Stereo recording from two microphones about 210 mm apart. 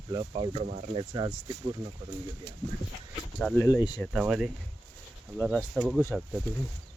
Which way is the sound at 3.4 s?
Centre (ahead or behind).